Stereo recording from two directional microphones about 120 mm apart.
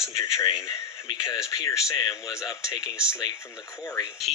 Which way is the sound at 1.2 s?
30° left (ahead or behind).